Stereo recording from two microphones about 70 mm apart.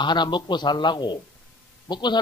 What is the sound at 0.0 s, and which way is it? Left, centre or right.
A man's voice, left.